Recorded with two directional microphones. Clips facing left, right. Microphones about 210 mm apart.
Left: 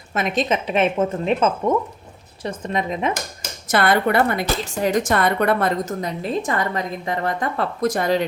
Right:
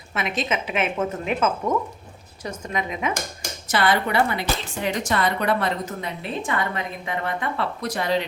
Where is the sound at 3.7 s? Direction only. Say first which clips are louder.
Left 4 dB; 55° left (ahead or behind).